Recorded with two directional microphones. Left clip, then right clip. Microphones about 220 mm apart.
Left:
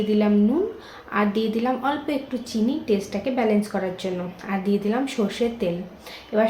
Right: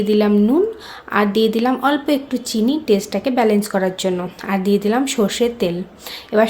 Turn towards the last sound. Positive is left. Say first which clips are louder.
# right 6 dB
turn(degrees=-50)  # may be behind; listen again after turning